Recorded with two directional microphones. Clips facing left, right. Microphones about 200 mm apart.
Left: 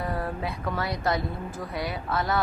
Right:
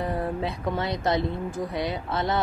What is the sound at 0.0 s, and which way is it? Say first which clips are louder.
Speech: right 3 dB; 20° right (ahead or behind).